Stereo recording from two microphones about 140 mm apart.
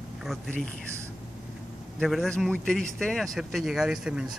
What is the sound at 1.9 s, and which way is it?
Speech, centre (ahead or behind).